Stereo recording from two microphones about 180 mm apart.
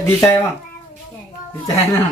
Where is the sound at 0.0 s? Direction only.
15° left (ahead or behind).